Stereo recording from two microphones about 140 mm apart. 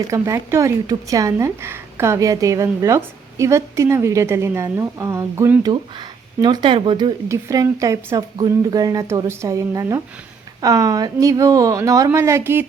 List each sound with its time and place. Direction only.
0.1 s a woman's voice: 20° right (ahead or behind)
5.7 s speech: 30° right (ahead or behind)
7.3 s a woman's voice: 20° right (ahead or behind)